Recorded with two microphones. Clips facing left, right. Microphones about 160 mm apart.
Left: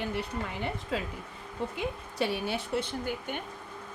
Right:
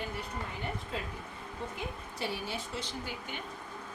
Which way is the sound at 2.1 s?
65° left (ahead or behind).